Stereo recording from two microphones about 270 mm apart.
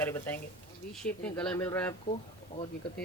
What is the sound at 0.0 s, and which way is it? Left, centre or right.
Speech, centre.